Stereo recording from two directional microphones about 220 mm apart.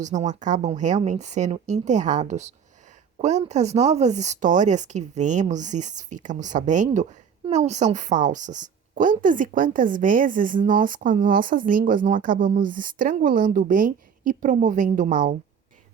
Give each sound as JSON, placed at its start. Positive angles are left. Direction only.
{"t": 0.0, "sound": "a woman's voice", "side_deg": -35}